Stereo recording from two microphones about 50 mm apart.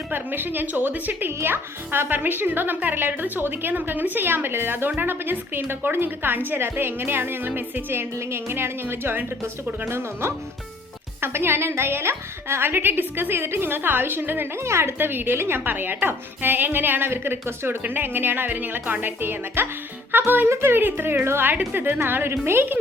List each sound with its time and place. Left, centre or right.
0.1 s a woman's voice: right
9.9 s speech: right
14.5 s speech: right